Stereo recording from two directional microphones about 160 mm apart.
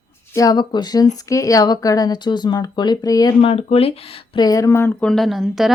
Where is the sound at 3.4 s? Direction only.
35° left (ahead or behind); by 5.1 s 15° left (ahead or behind).